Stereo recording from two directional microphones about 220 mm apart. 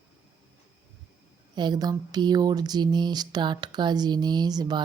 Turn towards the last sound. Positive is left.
turn(degrees=-20)  # may be behind; listen again after turning